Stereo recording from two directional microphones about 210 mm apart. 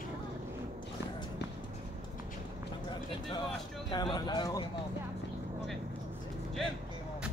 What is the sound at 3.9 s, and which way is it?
Speech, 20° left (ahead or behind).